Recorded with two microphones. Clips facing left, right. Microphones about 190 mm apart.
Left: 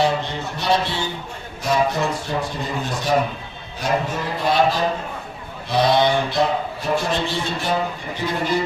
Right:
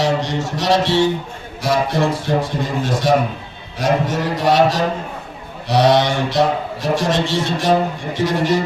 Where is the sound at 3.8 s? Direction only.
85° right.